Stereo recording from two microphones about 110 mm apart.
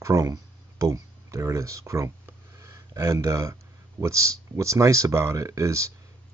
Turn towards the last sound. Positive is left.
turn(degrees=-25)  # may be behind; listen again after turning